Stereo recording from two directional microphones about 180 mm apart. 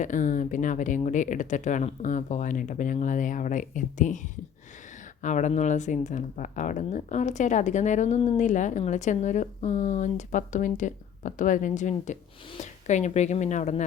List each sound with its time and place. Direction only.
0.0 s speech: 45° left (ahead or behind)